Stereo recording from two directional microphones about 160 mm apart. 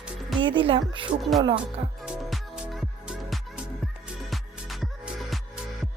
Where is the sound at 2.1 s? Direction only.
5° right (ahead or behind).